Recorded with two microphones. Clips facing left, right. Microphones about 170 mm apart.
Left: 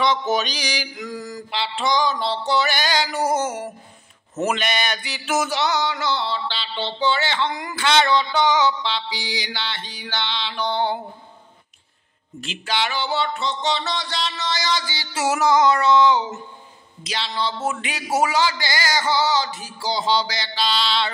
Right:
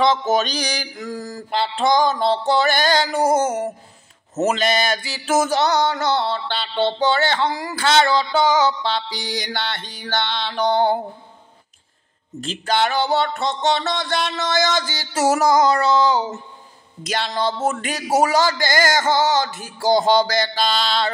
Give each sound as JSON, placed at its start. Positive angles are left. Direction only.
{"t": 0.0, "sound": "mantra", "side_deg": -45}
{"t": 3.4, "sound": "music", "side_deg": -25}
{"t": 4.6, "sound": "mantra", "side_deg": -35}
{"t": 12.4, "sound": "mantra", "side_deg": -45}
{"t": 17.0, "sound": "mantra", "side_deg": -50}